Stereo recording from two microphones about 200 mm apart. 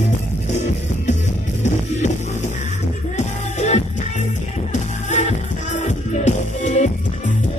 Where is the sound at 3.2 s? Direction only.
35° left (ahead or behind).